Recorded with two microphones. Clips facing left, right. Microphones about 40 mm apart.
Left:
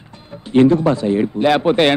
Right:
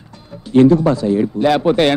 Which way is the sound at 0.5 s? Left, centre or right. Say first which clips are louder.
Right 2 dB; left.